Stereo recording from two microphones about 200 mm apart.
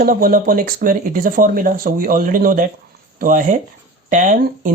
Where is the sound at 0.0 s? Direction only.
45° right (ahead or behind).